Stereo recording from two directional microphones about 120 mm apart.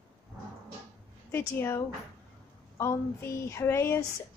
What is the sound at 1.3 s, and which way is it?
A woman's voice, 20° left (ahead or behind).